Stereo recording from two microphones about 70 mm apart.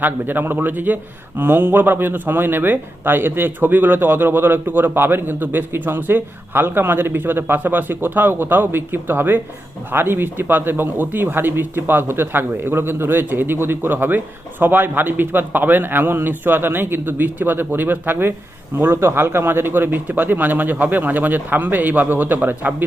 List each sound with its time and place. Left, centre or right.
0.0 s a man's voice: right